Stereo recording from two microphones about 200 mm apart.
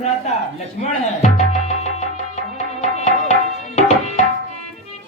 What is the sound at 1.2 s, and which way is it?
Music, 35° left (ahead or behind).